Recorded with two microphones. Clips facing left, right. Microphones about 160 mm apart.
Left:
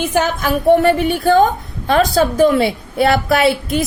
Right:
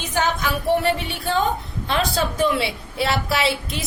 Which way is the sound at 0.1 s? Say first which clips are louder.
Left 6 dB; 45° left (ahead or behind).